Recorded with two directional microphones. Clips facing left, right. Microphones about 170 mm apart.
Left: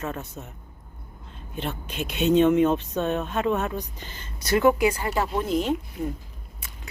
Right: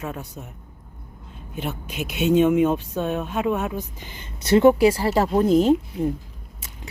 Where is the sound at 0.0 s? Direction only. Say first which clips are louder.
Even; centre (ahead or behind).